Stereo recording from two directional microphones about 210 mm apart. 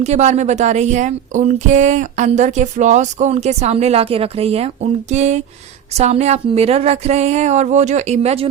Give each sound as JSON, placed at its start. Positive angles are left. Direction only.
{"t": 0.0, "sound": "speech", "side_deg": -30}